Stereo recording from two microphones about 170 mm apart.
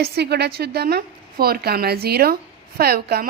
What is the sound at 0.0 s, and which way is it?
A woman's voice, 75° right (ahead or behind).